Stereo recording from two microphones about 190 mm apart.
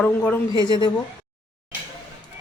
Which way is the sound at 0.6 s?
25° left (ahead or behind).